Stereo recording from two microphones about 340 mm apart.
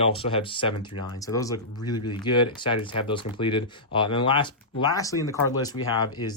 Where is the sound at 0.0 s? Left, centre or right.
Centre.